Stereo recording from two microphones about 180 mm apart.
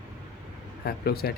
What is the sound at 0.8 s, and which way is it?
Speech, 60° left (ahead or behind).